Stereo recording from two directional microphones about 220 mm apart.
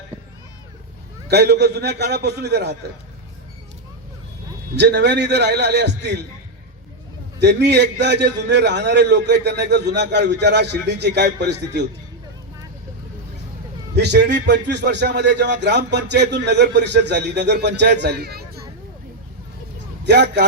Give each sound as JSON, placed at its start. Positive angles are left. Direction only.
{"t": 1.3, "sound": "a man's voice", "side_deg": -50}
{"t": 4.8, "sound": "a man's voice", "side_deg": -50}
{"t": 7.3, "sound": "a man's voice", "side_deg": -50}
{"t": 13.9, "sound": "a man's voice", "side_deg": -50}
{"t": 20.1, "sound": "a man's voice", "side_deg": -50}